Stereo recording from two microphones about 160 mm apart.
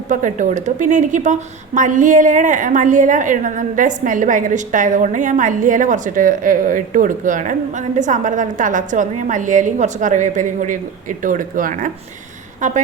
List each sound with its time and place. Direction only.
0.1 s a woman's voice: 50° right (ahead or behind)